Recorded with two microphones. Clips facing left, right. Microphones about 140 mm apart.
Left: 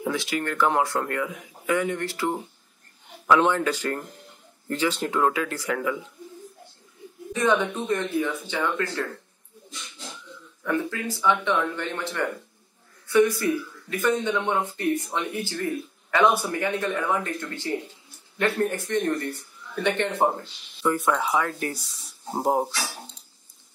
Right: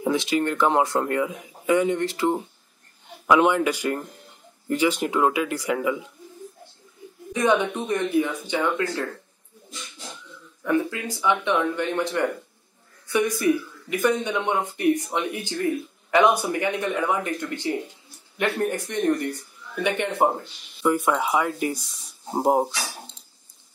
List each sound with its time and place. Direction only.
0.0 s speech: 20° right (ahead or behind)
7.3 s speech: 15° right (ahead or behind)
10.6 s speech: 15° right (ahead or behind)